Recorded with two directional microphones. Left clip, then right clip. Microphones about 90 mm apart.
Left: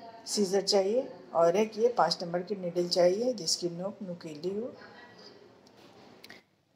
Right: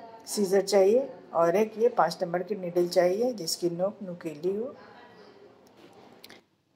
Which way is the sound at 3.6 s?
30° right (ahead or behind).